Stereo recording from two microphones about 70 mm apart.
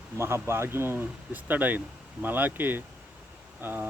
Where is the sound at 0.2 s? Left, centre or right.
Right.